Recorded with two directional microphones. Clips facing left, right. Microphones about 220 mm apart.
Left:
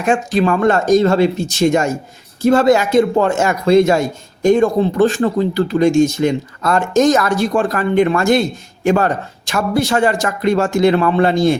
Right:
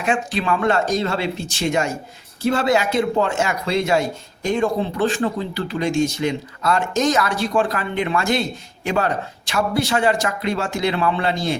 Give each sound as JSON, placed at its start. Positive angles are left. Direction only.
{"t": 0.0, "sound": "speech", "side_deg": 45}